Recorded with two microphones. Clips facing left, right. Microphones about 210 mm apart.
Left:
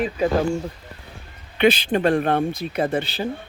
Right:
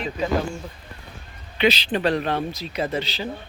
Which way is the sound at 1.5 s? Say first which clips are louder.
Left 3 dB; 50° left (ahead or behind).